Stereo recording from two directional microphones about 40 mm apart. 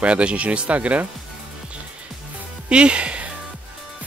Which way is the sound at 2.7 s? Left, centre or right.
Right.